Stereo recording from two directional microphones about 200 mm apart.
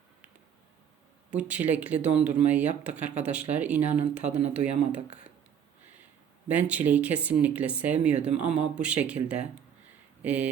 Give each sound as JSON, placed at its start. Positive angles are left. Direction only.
{"t": 1.3, "sound": "speech", "side_deg": -5}
{"t": 4.9, "sound": "speech", "side_deg": -30}
{"t": 6.5, "sound": "speech", "side_deg": -5}